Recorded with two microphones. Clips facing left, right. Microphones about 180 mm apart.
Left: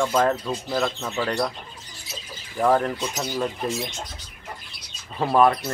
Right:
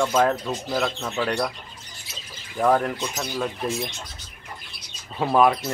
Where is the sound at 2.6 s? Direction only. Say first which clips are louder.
Even; centre (ahead or behind).